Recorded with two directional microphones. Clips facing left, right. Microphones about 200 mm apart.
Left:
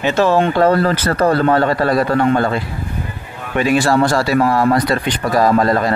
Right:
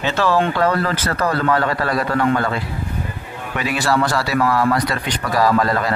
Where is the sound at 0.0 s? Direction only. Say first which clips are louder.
Left 4 dB; 20° left (ahead or behind).